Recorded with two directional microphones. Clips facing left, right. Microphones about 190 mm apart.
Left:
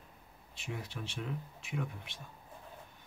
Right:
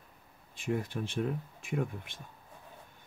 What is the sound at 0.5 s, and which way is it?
Speech, 50° right (ahead or behind).